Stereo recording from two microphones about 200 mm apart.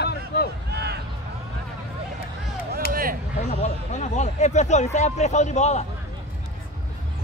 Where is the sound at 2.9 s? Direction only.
45° right (ahead or behind).